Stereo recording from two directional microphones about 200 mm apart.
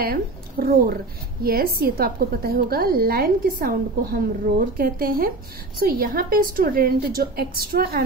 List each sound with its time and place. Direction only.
0.0 s a woman's voice: 50° right (ahead or behind)